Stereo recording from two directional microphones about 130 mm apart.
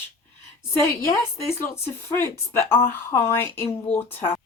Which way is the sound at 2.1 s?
20° left (ahead or behind).